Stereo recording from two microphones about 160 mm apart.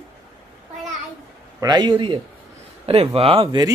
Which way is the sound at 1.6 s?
30° right (ahead or behind).